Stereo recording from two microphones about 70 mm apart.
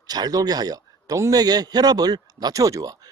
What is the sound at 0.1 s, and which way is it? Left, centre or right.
A man's voice, right.